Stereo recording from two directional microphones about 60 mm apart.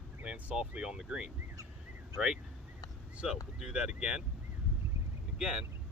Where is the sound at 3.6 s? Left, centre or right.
Centre.